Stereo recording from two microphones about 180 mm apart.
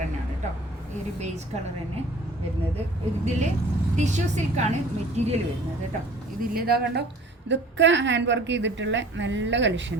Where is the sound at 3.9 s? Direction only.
40° right (ahead or behind).